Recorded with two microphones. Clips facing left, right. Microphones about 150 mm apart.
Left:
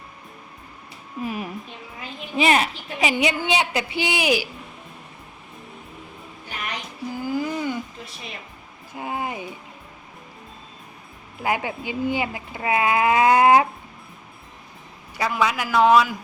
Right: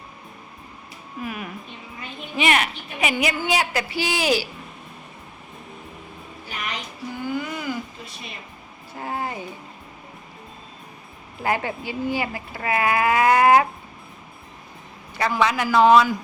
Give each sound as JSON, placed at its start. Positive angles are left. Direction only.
{"t": 1.2, "sound": "speech", "side_deg": 30}
{"t": 7.2, "sound": "a sound", "side_deg": 35}
{"t": 9.0, "sound": "speech", "side_deg": 15}
{"t": 11.4, "sound": "speech", "side_deg": 15}
{"t": 15.2, "sound": "a man's voice", "side_deg": 5}